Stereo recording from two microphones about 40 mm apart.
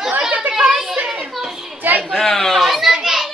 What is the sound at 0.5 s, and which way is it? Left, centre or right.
Children playing, centre.